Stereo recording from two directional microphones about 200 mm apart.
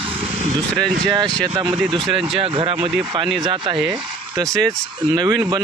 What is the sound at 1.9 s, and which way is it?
Speech, centre (ahead or behind).